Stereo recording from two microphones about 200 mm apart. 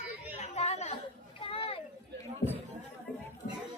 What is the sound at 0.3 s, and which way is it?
Chatter, 35° left (ahead or behind).